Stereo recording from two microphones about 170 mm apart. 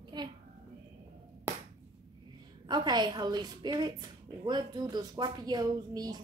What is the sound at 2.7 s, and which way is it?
A woman's voice, 25° right (ahead or behind).